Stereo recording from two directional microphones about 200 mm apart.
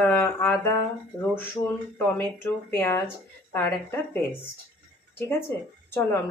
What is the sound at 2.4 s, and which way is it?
Speech, 10° left (ahead or behind).